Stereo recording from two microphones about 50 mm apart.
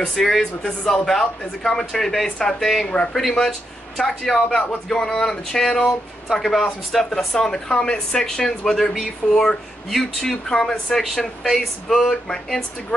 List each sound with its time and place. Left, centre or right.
0.0 s speech: centre
0.6 s speech: centre
2.9 s speech: centre
3.2 s speech: centre
4.1 s speech: centre
4.8 s speech: centre
10.5 s speech: centre